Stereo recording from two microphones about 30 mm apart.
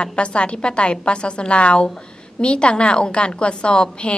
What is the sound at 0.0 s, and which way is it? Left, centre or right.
A woman's voice, left.